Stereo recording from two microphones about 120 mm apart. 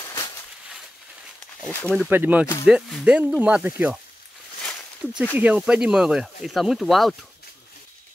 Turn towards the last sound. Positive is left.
turn(degrees=0)  # may be behind; listen again after turning